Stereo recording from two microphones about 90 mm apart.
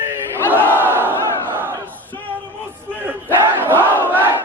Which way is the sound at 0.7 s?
25° right (ahead or behind).